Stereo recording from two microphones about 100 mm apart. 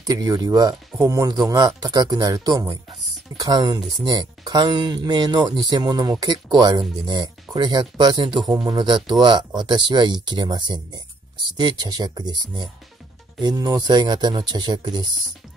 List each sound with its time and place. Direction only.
0.0 s speech: 35° right (ahead or behind)